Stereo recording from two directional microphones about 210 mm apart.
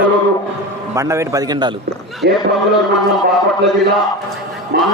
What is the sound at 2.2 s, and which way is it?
Speech, 50° right (ahead or behind).